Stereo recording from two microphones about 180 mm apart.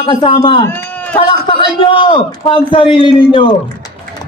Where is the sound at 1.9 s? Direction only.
30° left (ahead or behind).